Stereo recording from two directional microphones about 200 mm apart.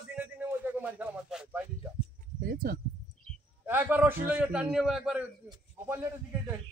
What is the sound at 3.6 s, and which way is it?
A man's voice, 10° right (ahead or behind).